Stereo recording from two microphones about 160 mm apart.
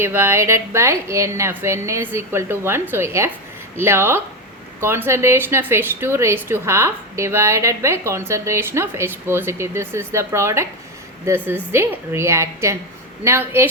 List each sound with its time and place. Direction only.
0.0 s speech: 15° right (ahead or behind)